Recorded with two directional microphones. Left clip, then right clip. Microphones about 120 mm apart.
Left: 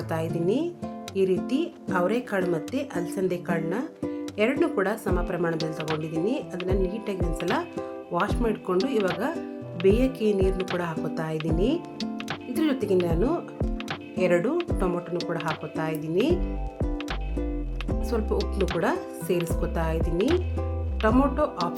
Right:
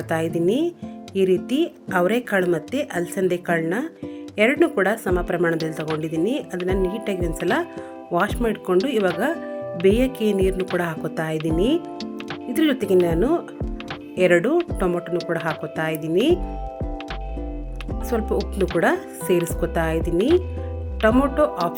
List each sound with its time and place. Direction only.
0.1 s a woman's voice: 35° right (ahead or behind)
5.7 s speech: centre (ahead or behind)
6.1 s a woman's voice: 35° right (ahead or behind)
9.0 s speech: centre (ahead or behind)
9.8 s a woman's voice: 35° right (ahead or behind)
18.1 s a woman's voice: 35° right (ahead or behind)
18.5 s speech: centre (ahead or behind)
18.8 s a woman's voice: 35° right (ahead or behind)
20.1 s speech: centre (ahead or behind)
21.0 s a woman's voice: 30° right (ahead or behind)